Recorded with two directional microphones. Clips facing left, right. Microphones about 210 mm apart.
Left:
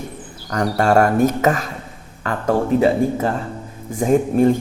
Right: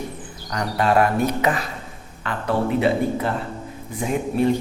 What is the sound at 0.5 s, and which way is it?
Speech, 45° left (ahead or behind).